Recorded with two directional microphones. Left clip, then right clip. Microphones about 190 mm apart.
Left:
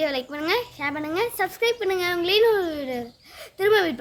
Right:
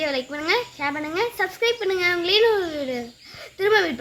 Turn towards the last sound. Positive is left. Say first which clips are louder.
# even
turn(degrees=35)  # may be behind; listen again after turning